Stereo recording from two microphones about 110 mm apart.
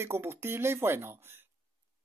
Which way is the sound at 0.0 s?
20° right (ahead or behind).